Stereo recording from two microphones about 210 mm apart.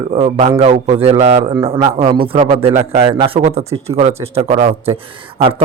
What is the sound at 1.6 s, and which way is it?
A man's voice, 20° right (ahead or behind).